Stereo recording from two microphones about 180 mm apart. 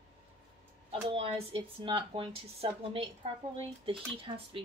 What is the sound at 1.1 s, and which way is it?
Speech, 30° right (ahead or behind).